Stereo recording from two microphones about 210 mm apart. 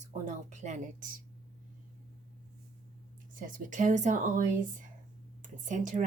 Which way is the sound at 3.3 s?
40° right (ahead or behind).